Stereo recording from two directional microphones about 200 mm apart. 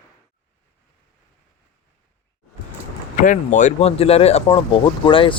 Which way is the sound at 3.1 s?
40° left (ahead or behind).